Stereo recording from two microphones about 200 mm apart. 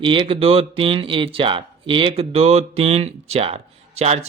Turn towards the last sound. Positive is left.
turn(degrees=-30)  # may be behind; listen again after turning